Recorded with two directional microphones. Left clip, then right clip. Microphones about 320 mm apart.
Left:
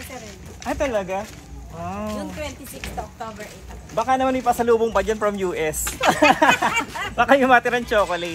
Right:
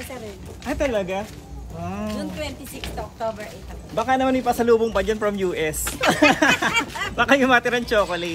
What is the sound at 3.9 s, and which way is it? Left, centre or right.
A man's voice, centre.